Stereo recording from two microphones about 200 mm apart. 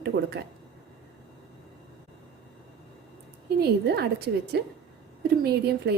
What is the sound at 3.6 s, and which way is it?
A woman's voice, 55° right (ahead or behind).